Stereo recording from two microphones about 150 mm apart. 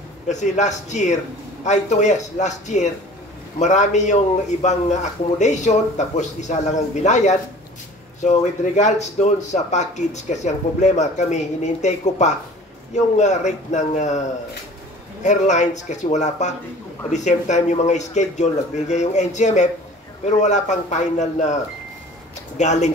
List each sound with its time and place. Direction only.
0.3 s speech: 50° left (ahead or behind)
15.2 s speech: 50° left (ahead or behind)
22.6 s speech: 50° left (ahead or behind)